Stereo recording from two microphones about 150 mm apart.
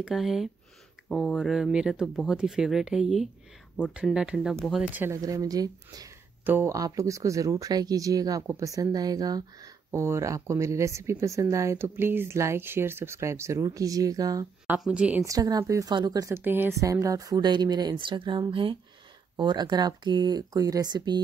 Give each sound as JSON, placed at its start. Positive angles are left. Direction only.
{"t": 0.0, "sound": "speech", "side_deg": 0}
{"t": 4.9, "sound": "speech", "side_deg": -15}
{"t": 14.8, "sound": "a woman's voice", "side_deg": -5}
{"t": 15.2, "sound": "speech", "side_deg": -25}